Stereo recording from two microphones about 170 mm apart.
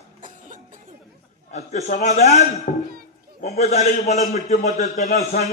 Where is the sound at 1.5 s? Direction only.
40° left (ahead or behind).